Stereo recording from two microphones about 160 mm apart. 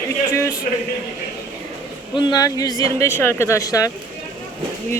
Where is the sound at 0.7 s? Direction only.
55° left (ahead or behind).